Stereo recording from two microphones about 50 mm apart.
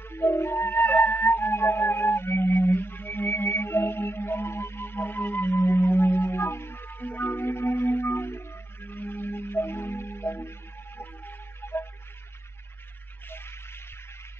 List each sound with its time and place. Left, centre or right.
0.1 s flute: left
7.5 s music: left
13.3 s music: left